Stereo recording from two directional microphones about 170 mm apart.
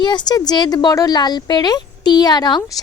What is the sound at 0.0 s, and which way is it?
Speech, 25° left (ahead or behind).